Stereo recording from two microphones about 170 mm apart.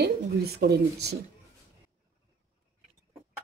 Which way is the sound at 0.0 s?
70° right (ahead or behind).